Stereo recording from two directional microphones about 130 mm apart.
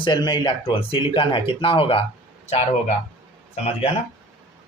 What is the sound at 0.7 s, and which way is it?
Speech, 45° left (ahead or behind).